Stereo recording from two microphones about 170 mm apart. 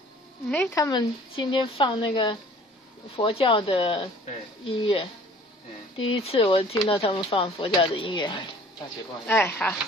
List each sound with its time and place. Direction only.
0.5 s speech: 10° left (ahead or behind)
0.8 s a woman's voice: 25° left (ahead or behind)
6.1 s speech: 30° left (ahead or behind)
9.2 s speech: 10° left (ahead or behind)